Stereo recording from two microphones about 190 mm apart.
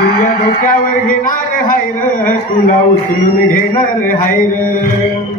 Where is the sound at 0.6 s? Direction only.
45° left (ahead or behind).